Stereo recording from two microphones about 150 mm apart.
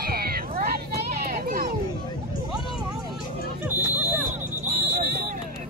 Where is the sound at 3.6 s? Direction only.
15° right (ahead or behind).